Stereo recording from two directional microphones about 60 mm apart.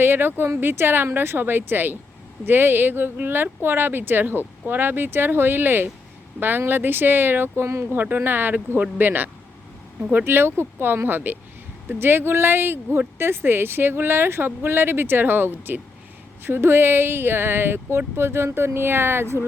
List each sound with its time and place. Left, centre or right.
0.0 s speech: right
7.9 s speech: right